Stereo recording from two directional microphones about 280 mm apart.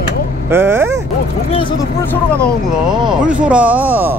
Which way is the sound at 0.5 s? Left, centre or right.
Centre.